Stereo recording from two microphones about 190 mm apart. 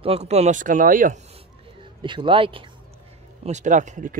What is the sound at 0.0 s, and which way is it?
Speech, 35° right (ahead or behind).